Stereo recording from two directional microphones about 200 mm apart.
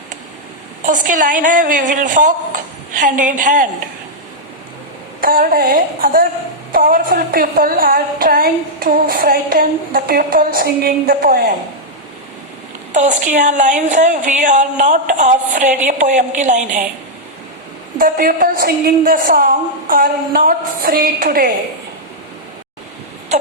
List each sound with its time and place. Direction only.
0.8 s speech: 40° right (ahead or behind)
5.2 s a woman's voice: 45° right (ahead or behind)
12.9 s speech: 40° right (ahead or behind)
17.9 s a woman's voice: 45° right (ahead or behind)